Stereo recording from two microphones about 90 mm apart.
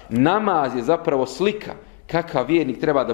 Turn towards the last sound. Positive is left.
turn(degrees=15)  # may be behind; listen again after turning